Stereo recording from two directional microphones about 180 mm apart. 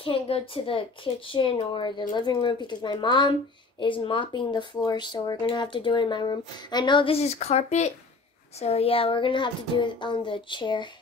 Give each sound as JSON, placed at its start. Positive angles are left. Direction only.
{"t": 0.0, "sound": "speech", "side_deg": 30}